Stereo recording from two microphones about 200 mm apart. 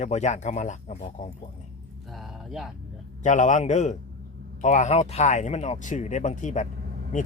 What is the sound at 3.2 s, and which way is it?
A man's voice, 40° left (ahead or behind).